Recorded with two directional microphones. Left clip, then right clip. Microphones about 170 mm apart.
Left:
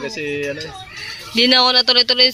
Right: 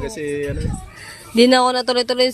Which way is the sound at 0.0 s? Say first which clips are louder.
Left 1 dB; 25° right (ahead or behind).